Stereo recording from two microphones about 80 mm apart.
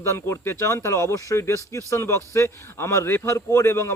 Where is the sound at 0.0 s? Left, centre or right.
Left.